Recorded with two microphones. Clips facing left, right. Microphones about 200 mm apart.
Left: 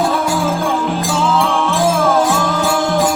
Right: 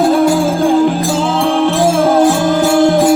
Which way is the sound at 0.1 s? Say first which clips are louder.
Right 6 dB; 35° right (ahead or behind).